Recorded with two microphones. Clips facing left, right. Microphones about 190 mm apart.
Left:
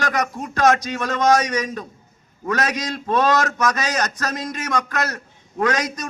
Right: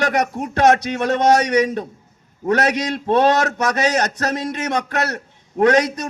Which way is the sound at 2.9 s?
30° right (ahead or behind).